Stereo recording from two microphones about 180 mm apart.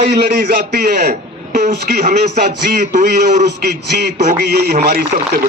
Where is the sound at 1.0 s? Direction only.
40° right (ahead or behind).